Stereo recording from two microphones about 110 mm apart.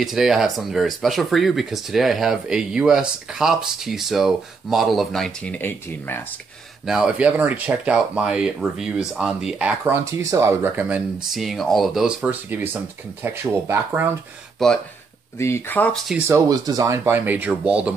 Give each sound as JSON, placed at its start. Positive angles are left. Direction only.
{"t": 0.0, "sound": "speech", "side_deg": -5}
{"t": 6.9, "sound": "speech", "side_deg": -10}
{"t": 9.8, "sound": "speech", "side_deg": -30}
{"t": 11.3, "sound": "speech", "side_deg": 0}
{"t": 12.4, "sound": "speech", "side_deg": -20}
{"t": 14.6, "sound": "speech", "side_deg": 0}
{"t": 15.3, "sound": "speech", "side_deg": 25}
{"t": 16.2, "sound": "speech", "side_deg": -20}
{"t": 16.4, "sound": "speech", "side_deg": -35}